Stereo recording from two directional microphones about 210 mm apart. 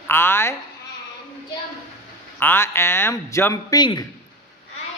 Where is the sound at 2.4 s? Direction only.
10° left (ahead or behind).